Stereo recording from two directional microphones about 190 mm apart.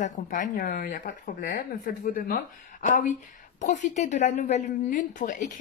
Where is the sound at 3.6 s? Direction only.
40° left (ahead or behind).